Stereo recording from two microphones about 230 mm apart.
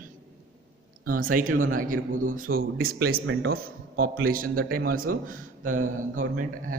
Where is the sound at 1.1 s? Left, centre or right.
Right.